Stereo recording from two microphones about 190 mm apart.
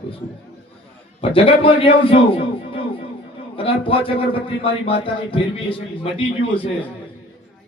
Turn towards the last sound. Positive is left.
turn(degrees=30)  # may be behind; listen again after turning